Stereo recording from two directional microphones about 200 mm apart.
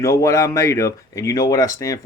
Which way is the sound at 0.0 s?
15° left (ahead or behind).